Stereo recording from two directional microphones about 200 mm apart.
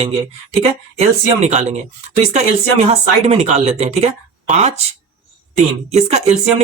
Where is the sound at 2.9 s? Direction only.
30° right (ahead or behind).